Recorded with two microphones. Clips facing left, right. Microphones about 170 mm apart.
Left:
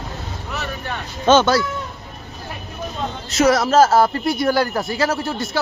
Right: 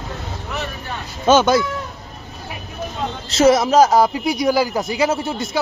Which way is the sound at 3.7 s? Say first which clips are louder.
Right 1 dB; centre (ahead or behind).